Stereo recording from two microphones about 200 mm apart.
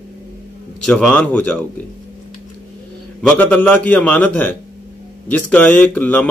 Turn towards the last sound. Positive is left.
turn(degrees=10)  # may be behind; listen again after turning